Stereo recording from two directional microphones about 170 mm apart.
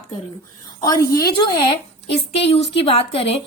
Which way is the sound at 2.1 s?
35° left (ahead or behind).